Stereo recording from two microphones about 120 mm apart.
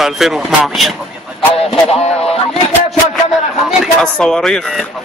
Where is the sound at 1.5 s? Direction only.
55° left (ahead or behind).